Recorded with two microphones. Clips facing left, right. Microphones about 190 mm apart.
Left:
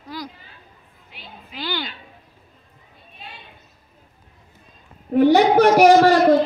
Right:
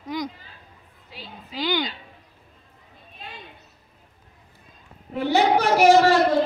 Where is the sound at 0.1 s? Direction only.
20° right (ahead or behind).